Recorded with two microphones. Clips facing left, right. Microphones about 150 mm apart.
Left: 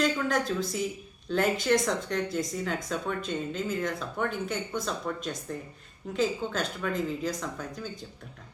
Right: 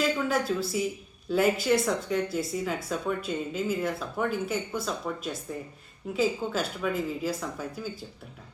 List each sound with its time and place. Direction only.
0.0 s speech: 5° right (ahead or behind)